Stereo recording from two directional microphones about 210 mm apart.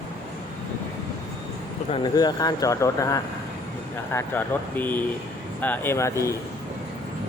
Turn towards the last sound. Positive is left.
turn(degrees=15)  # may be behind; listen again after turning